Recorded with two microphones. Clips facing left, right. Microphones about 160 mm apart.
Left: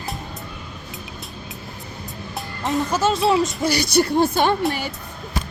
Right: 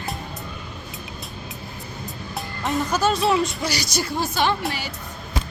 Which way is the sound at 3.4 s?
55° left (ahead or behind).